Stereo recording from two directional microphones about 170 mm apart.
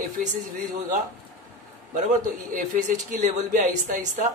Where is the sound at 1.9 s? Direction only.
50° right (ahead or behind).